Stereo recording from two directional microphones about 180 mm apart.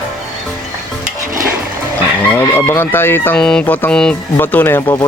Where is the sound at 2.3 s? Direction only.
10° left (ahead or behind).